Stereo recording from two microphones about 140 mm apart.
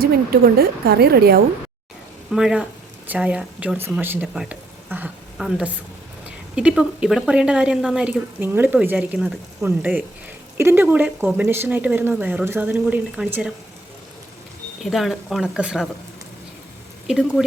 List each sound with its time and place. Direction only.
0.0 s speech: 90° right
2.3 s speech: 5° right (ahead or behind)
4.4 s a sound: 10° right (ahead or behind)
6.6 s speech: 5° right (ahead or behind)
14.8 s speech: centre (ahead or behind)
17.1 s speech: centre (ahead or behind)